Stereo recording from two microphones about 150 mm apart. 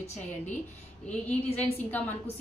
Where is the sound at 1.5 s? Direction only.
10° left (ahead or behind).